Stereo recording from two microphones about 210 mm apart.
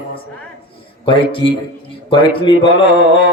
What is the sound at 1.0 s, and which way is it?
A man's voice, 25° left (ahead or behind).